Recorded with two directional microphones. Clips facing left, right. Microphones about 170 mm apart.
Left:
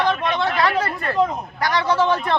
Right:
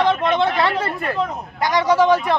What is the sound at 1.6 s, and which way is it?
Speech, 15° right (ahead or behind).